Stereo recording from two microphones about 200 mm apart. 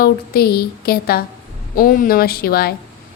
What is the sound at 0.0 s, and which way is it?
A woman's voice, 50° left (ahead or behind).